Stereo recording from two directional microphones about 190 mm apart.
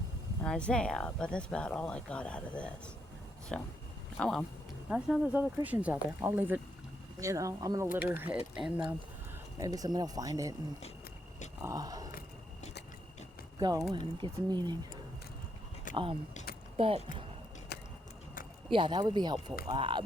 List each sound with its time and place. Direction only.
0.4 s speech: 5° left (ahead or behind)
9.6 s speech: 20° right (ahead or behind)
11.6 s speech: 20° right (ahead or behind)
13.6 s speech: 20° right (ahead or behind)
16.7 s speech: 30° right (ahead or behind)
17.7 s a sound: 60° left (ahead or behind)
18.7 s speech: 25° right (ahead or behind)